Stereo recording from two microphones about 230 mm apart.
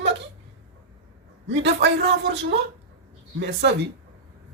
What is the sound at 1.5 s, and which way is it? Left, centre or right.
Speech, right.